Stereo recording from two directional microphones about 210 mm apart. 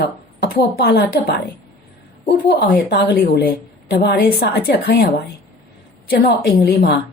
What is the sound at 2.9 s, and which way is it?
A woman's voice, 50° left (ahead or behind).